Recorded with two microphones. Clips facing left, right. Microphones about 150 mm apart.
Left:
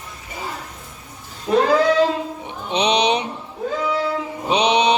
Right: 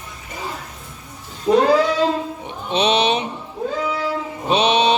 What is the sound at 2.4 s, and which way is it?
Speech, 15° left (ahead or behind).